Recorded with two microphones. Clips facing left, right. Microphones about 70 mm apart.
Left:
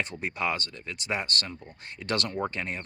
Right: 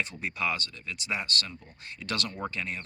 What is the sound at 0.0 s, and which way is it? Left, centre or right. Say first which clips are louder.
Speech: left 1 dB; left.